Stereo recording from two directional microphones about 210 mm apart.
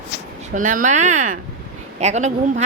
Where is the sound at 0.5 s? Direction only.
40° right (ahead or behind).